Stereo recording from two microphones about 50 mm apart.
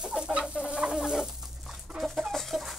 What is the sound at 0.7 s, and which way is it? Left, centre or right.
Fowl, centre.